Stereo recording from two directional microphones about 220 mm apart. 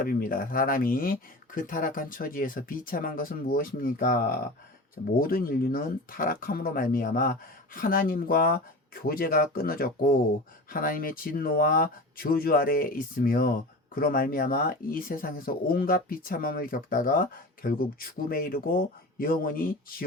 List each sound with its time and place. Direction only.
0.0 s speech: 40° left (ahead or behind)